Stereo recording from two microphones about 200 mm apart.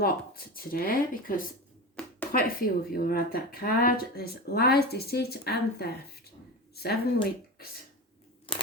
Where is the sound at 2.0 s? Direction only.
5° left (ahead or behind).